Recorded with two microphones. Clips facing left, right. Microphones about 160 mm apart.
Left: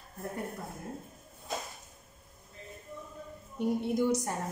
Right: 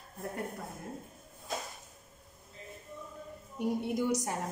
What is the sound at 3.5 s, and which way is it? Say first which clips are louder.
Speech: left 2 dB; 10° right (ahead or behind).